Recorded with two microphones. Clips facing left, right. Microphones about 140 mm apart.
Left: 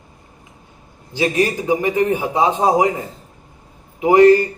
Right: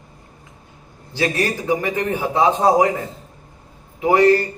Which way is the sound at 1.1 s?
15° left (ahead or behind).